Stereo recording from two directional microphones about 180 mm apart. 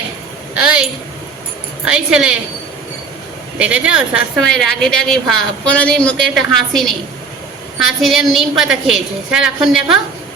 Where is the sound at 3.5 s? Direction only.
5° right (ahead or behind).